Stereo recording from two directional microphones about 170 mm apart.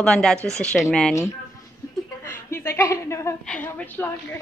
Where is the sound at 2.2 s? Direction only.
15° left (ahead or behind).